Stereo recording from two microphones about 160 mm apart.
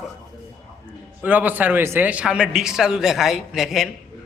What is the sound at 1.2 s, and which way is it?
A man's voice, 10° right (ahead or behind).